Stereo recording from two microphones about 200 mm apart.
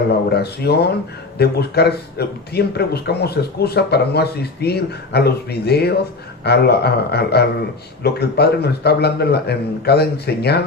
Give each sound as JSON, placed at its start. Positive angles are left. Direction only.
{"t": 0.3, "sound": "speech", "side_deg": 55}